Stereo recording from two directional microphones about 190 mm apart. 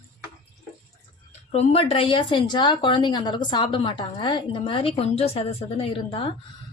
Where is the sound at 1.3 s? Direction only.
30° left (ahead or behind).